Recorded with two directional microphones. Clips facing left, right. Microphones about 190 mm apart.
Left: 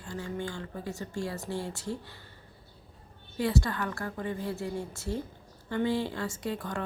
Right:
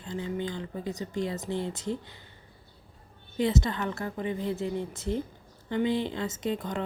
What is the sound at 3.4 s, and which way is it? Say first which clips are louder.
A woman's voice: right 2 dB; 20° right (ahead or behind).